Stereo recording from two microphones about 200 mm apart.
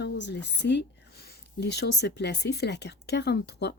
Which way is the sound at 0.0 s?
60° left (ahead or behind).